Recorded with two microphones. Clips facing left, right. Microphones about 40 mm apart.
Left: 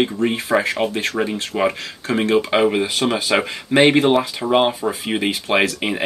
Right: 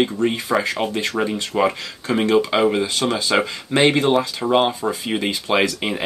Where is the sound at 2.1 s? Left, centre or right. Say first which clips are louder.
Even; centre.